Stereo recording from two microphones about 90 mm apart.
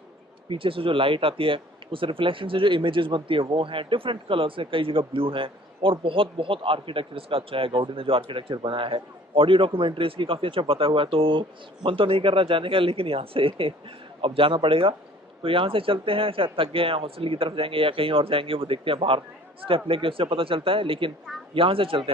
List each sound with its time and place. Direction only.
0.5 s speech: 80° right
19.9 s speech: 90° right